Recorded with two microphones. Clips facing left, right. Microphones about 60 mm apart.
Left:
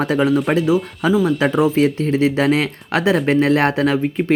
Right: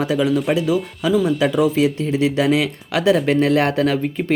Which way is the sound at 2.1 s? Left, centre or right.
Left.